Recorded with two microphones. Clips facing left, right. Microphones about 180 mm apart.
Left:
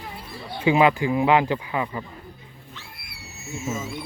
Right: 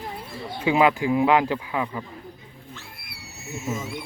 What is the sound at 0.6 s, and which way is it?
Speech, centre (ahead or behind).